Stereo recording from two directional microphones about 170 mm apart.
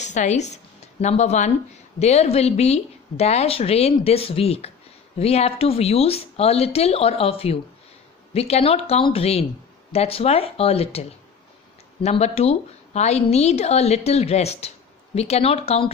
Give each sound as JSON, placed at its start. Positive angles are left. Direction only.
{"t": 0.0, "sound": "a woman's voice", "side_deg": 45}